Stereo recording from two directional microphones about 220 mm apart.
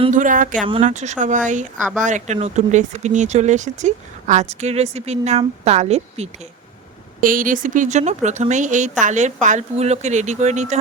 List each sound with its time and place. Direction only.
0.0 s speech: 35° right (ahead or behind)